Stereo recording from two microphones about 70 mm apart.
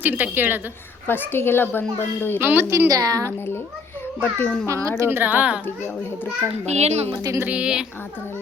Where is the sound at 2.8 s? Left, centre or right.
Right.